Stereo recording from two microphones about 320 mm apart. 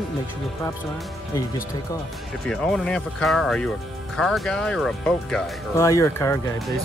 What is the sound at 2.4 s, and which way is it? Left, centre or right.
Speech, centre.